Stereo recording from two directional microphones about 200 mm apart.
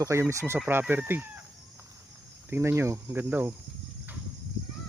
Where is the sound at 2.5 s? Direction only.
10° right (ahead or behind).